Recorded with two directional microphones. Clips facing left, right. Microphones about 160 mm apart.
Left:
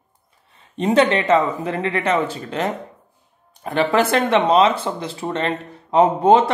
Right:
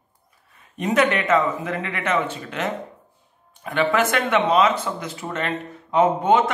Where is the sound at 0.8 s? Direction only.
30° left (ahead or behind).